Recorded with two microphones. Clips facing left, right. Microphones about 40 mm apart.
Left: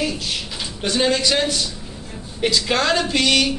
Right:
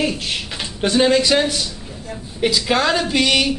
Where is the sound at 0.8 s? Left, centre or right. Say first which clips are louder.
Right 4 dB; centre.